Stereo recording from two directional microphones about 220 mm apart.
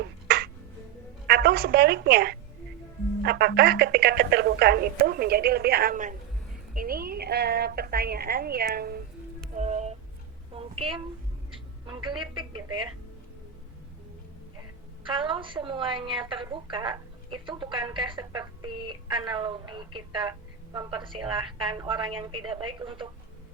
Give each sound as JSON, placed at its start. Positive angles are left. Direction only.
{"t": 0.3, "sound": "finger snapping", "side_deg": -45}
{"t": 1.3, "sound": "a woman's voice", "side_deg": -45}
{"t": 9.6, "sound": "a sound", "side_deg": -30}
{"t": 10.5, "sound": "a woman's voice", "side_deg": -25}
{"t": 15.0, "sound": "a woman's voice", "side_deg": -20}